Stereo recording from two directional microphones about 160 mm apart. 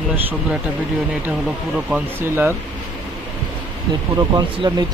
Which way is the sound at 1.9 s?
15° right (ahead or behind).